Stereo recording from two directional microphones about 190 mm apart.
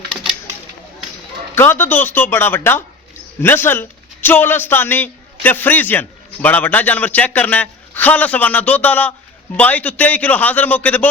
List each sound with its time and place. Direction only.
1.5 s a man's voice: 10° left (ahead or behind)